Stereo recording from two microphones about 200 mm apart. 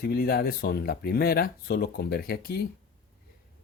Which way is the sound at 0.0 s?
50° left (ahead or behind).